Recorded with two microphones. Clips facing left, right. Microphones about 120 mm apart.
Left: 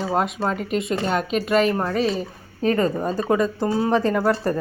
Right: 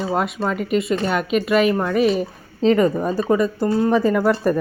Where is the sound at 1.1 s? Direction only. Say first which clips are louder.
Right 2 dB; 35° left (ahead or behind).